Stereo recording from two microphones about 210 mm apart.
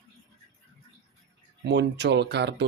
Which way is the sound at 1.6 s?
55° right (ahead or behind).